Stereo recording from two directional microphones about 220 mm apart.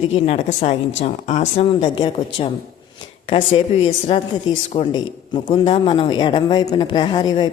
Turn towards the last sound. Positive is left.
turn(degrees=20)  # may be behind; listen again after turning